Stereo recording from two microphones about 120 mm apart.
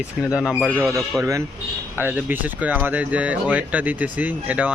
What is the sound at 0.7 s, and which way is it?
Speech, 20° right (ahead or behind).